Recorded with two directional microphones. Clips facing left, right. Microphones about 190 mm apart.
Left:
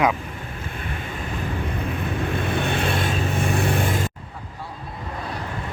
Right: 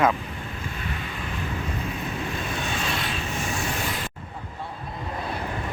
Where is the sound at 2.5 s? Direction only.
60° left (ahead or behind).